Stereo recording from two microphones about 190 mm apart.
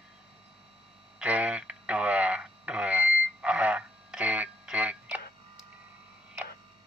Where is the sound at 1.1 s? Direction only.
5° right (ahead or behind).